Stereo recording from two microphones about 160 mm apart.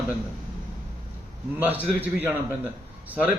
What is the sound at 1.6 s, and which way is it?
A man's voice, 10° right (ahead or behind).